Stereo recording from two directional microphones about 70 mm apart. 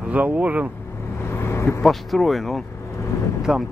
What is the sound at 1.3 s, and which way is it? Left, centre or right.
Vehicle, left.